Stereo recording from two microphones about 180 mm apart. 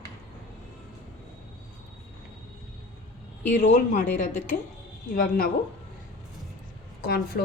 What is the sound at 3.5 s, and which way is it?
A woman's voice, 45° left (ahead or behind).